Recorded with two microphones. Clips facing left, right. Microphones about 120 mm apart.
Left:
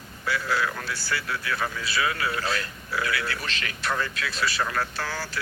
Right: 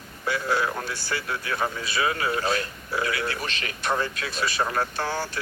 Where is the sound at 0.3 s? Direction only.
25° right (ahead or behind).